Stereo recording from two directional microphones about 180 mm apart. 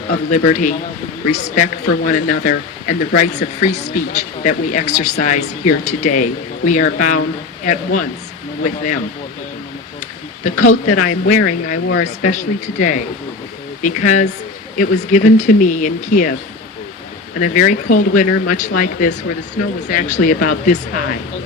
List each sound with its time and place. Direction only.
0.1 s speech: 45° left (ahead or behind)
10.4 s speech: 45° left (ahead or behind)
17.4 s speech: 45° left (ahead or behind)